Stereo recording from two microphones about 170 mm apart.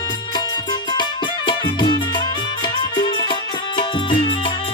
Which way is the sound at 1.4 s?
25° left (ahead or behind).